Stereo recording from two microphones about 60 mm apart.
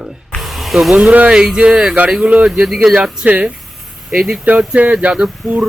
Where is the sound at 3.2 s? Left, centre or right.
Right.